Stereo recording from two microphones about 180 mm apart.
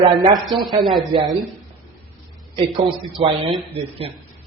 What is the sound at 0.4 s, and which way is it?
Speech, centre (ahead or behind).